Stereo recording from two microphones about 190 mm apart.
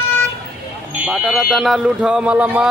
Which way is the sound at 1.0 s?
Centre (ahead or behind).